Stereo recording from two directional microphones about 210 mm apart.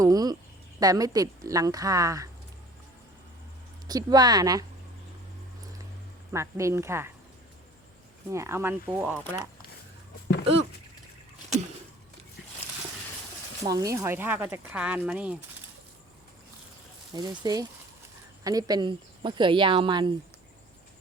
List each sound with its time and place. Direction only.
0.0 s a sound: 20° right (ahead or behind)
0.8 s speech: 15° right (ahead or behind)
3.8 s speech: 20° right (ahead or behind)
6.3 s speech: 15° right (ahead or behind)
8.3 s speech: 15° right (ahead or behind)
13.7 s speech: 15° right (ahead or behind)
17.1 s speech: 20° right (ahead or behind)